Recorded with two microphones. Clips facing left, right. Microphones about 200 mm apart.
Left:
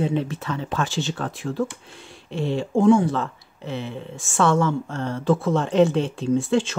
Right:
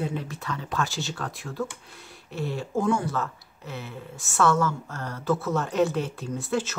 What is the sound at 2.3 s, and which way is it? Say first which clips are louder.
Speech: left 6 dB; 25° left (ahead or behind).